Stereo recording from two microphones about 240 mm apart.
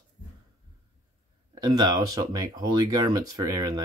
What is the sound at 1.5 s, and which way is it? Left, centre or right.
Speech, centre.